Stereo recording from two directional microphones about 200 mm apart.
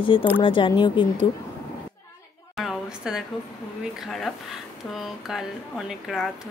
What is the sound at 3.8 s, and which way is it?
Speech, centre (ahead or behind).